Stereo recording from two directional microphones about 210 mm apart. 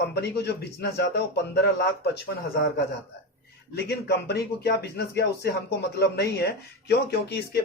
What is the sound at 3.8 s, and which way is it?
Speech, 50° left (ahead or behind).